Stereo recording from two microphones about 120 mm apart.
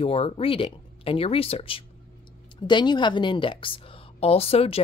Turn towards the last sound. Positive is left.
turn(degrees=55)  # may be behind; listen again after turning